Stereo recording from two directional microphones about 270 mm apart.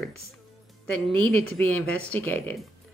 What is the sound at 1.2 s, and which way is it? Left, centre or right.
Speech, centre.